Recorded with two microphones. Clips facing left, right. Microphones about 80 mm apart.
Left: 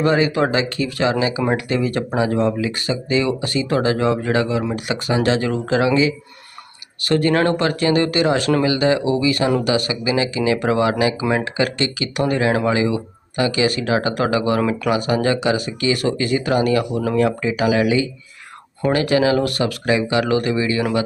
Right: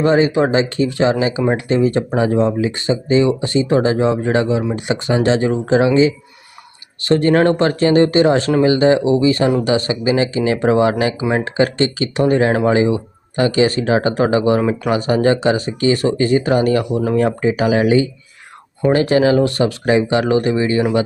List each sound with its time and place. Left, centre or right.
0.0 s speech: right